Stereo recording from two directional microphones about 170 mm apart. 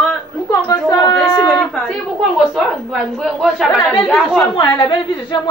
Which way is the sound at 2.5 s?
Centre (ahead or behind).